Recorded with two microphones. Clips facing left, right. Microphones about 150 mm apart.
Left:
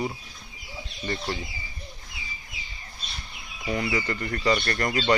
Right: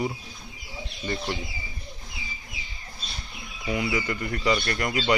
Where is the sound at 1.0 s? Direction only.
15° right (ahead or behind).